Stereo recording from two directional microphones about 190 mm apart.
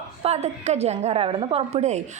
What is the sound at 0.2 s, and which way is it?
A woman's voice, 35° right (ahead or behind).